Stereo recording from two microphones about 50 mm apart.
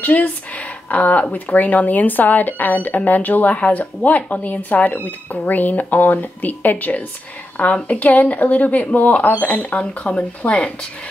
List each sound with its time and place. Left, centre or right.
0.0 s speech: left